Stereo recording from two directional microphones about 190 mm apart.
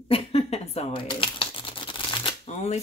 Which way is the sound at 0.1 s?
30° left (ahead or behind).